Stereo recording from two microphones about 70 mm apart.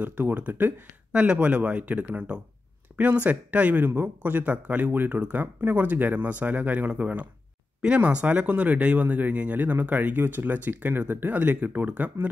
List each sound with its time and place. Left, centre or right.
0.0 s speech: right